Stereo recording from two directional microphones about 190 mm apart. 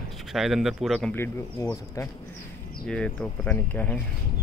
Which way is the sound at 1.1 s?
15° left (ahead or behind).